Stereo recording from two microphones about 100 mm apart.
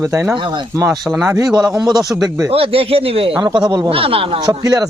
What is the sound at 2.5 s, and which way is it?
Speech, 70° right (ahead or behind).